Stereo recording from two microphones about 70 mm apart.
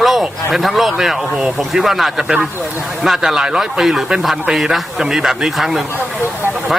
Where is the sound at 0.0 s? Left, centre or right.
Centre.